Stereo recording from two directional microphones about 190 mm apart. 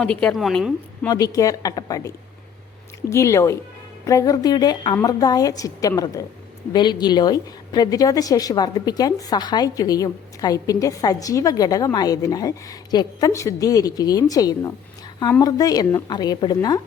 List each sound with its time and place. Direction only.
0.0 s a woman's voice: 5° left (ahead or behind)
1.0 s a woman's voice: 20° left (ahead or behind)